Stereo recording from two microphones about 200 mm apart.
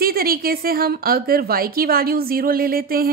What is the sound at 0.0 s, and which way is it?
A woman's voice, 50° right (ahead or behind).